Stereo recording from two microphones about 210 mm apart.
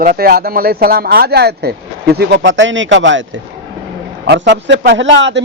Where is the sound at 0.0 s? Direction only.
45° right (ahead or behind); by 3.2 s 60° right (ahead or behind).